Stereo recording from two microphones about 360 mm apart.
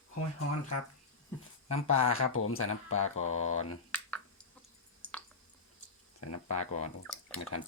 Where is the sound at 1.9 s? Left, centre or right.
Left.